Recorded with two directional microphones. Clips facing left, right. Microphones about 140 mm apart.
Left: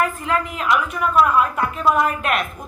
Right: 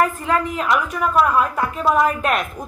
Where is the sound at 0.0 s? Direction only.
35° right (ahead or behind).